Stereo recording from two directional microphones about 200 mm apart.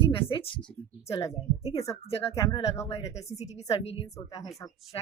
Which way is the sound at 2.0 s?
30° left (ahead or behind).